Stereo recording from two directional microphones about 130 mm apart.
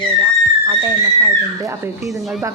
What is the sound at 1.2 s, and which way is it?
Speech, 25° right (ahead or behind).